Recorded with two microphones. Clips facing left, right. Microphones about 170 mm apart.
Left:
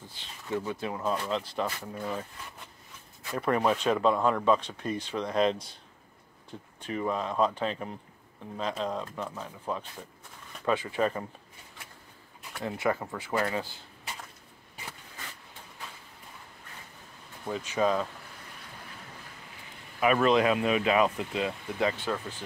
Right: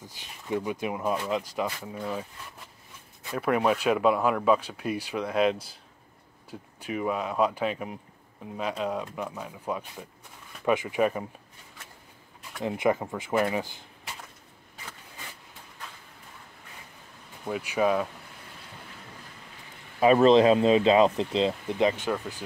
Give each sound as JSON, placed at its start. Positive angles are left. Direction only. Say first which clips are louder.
{"t": 0.2, "sound": "speech", "louder": "right 2 dB", "side_deg": -15}
{"t": 3.3, "sound": "speech", "louder": "right 2 dB", "side_deg": -5}
{"t": 6.8, "sound": "speech", "louder": "right 2 dB", "side_deg": -10}
{"t": 12.6, "sound": "speech", "louder": "right 4 dB", "side_deg": -20}
{"t": 17.5, "sound": "speech", "louder": "right 2 dB", "side_deg": -10}
{"t": 20.0, "sound": "speech", "louder": "right 6 dB", "side_deg": -30}